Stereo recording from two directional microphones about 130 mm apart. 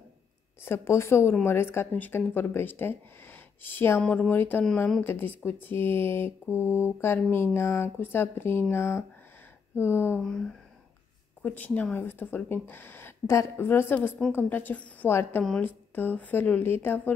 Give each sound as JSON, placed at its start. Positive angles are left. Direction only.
{"t": 0.6, "sound": "speech", "side_deg": 20}
{"t": 10.2, "sound": "a sound", "side_deg": 5}
{"t": 11.4, "sound": "speech", "side_deg": 10}